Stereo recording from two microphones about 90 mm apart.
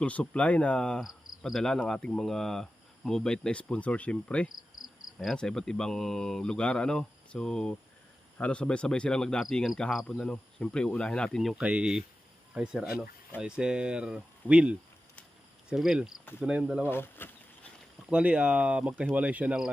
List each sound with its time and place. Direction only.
0.0 s speech: 15° left (ahead or behind)
11.5 s speech: 10° right (ahead or behind)
16.8 s insect: 25° left (ahead or behind)
18.1 s speech: 15° right (ahead or behind)